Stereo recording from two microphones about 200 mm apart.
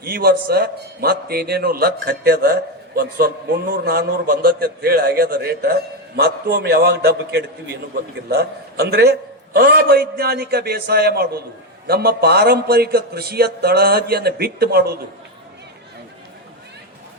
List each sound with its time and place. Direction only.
0.0 s a man's voice: 50° right (ahead or behind)